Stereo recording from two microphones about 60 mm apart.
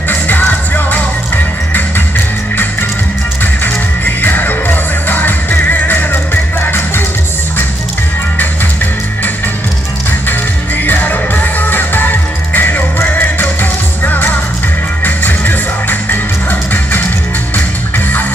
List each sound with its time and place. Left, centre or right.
0.1 s music: left
10.9 s music: left